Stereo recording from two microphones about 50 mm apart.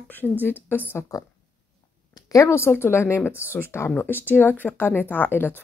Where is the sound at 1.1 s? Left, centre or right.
Left.